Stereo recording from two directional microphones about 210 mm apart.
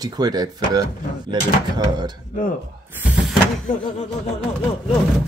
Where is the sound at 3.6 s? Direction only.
35° left (ahead or behind).